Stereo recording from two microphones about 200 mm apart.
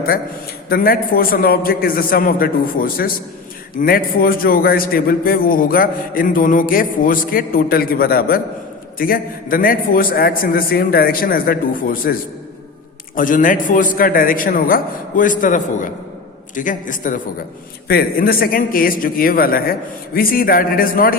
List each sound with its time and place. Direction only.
0.7 s a man's voice: 45° left (ahead or behind)
13.1 s a man's voice: 40° left (ahead or behind)